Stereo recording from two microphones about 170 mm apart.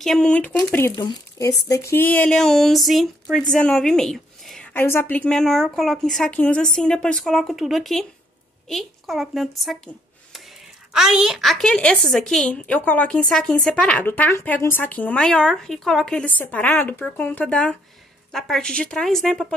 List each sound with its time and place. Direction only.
0.0 s a woman's voice: 5° left (ahead or behind)
0.9 s a woman's voice: 25° left (ahead or behind); by 9.5 s centre (ahead or behind)
9.6 s a sound: centre (ahead or behind)
10.9 s a woman's voice: 5° right (ahead or behind)